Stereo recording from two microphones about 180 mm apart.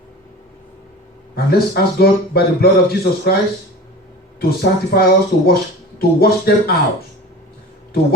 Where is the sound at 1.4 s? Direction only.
60° left (ahead or behind).